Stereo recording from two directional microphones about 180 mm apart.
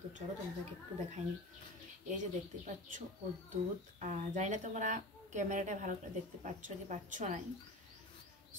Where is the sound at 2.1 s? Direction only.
45° right (ahead or behind).